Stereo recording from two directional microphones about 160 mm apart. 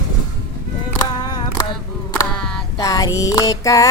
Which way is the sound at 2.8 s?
20° left (ahead or behind).